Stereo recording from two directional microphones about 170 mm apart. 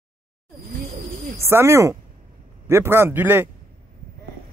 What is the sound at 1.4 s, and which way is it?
Speech, 15° right (ahead or behind).